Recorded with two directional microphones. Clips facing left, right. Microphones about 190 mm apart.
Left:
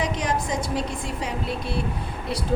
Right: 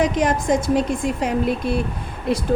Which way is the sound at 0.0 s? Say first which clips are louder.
Right 7 dB; 50° right (ahead or behind).